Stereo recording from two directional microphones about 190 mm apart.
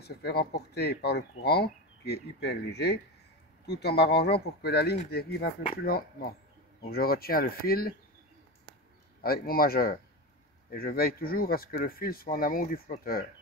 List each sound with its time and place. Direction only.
0.0 s speech: 55° left (ahead or behind)
9.2 s speech: 50° left (ahead or behind)